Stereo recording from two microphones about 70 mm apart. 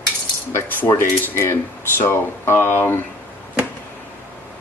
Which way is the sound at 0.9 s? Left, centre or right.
Left.